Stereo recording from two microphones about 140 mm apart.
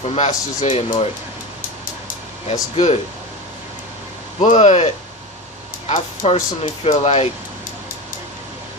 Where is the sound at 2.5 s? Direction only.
45° left (ahead or behind).